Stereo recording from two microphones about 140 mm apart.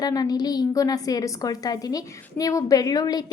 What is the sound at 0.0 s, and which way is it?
A woman's voice, 25° left (ahead or behind).